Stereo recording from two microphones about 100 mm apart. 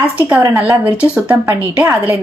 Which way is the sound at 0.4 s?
30° right (ahead or behind).